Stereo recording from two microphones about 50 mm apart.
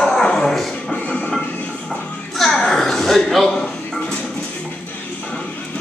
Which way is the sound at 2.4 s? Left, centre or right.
Centre.